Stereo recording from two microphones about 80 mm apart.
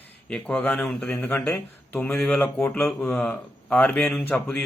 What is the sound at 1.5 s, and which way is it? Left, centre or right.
Speech, left.